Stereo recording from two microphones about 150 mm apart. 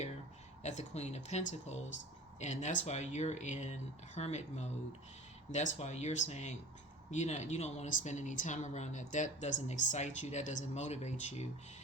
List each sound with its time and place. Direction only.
0.6 s speech: 50° left (ahead or behind)